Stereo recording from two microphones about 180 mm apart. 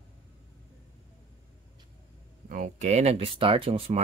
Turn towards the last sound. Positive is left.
turn(degrees=-30)  # may be behind; listen again after turning